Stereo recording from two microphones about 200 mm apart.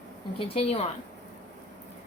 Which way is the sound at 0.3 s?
30° left (ahead or behind).